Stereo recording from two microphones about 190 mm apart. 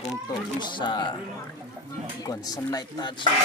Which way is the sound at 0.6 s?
25° left (ahead or behind).